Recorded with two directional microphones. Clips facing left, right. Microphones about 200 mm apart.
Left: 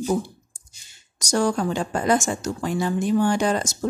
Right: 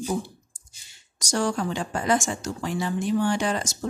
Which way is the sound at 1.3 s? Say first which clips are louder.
Left 4 dB; 40° left (ahead or behind).